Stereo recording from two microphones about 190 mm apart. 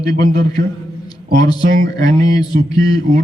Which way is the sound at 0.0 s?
20° left (ahead or behind).